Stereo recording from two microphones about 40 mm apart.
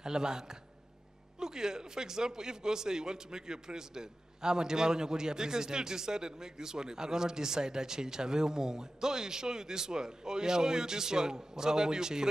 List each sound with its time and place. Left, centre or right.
0.0 s a man's voice: centre